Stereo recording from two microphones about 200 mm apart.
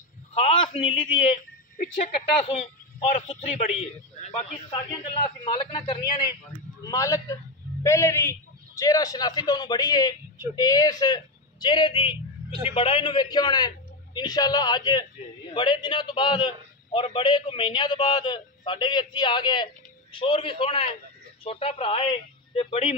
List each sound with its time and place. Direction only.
0.3 s a man's voice: 30° left (ahead or behind)
2.4 s a man's voice: 40° left (ahead or behind)